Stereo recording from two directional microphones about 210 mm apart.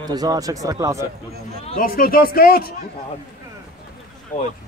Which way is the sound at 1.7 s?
40° left (ahead or behind).